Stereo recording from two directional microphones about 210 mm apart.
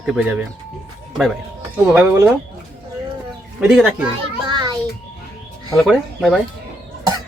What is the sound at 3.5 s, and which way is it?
Speech, 5° right (ahead or behind).